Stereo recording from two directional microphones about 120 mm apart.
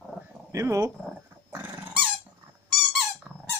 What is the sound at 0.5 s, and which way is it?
Speech, 25° right (ahead or behind).